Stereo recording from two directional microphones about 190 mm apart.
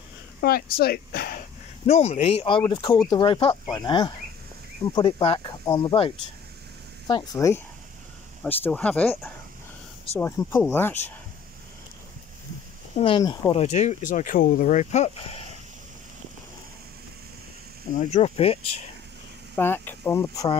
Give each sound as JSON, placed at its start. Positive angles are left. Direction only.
{"t": 0.4, "sound": "speech", "side_deg": 50}
{"t": 1.9, "sound": "speech", "side_deg": 35}
{"t": 12.9, "sound": "speech", "side_deg": 25}
{"t": 17.9, "sound": "speech", "side_deg": 35}
{"t": 19.5, "sound": "speech", "side_deg": 10}